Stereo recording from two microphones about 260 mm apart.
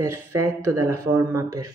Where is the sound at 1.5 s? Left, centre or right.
Right.